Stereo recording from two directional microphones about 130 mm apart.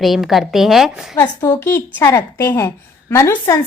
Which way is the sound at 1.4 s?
25° left (ahead or behind).